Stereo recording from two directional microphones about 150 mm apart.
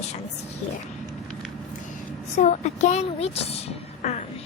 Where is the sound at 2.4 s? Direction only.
50° left (ahead or behind).